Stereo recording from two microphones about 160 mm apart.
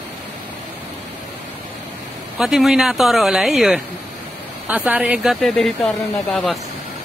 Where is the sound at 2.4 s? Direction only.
Centre (ahead or behind).